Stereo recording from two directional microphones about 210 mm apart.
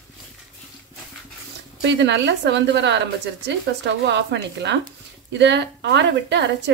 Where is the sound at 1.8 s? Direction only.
55° right (ahead or behind).